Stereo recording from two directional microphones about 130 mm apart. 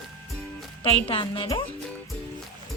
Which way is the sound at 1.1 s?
45° left (ahead or behind).